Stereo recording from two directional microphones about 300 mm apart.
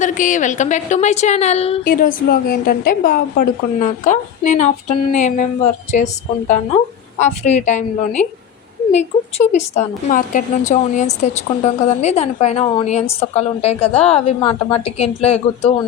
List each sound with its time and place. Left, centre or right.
0.0 s a woman's voice: left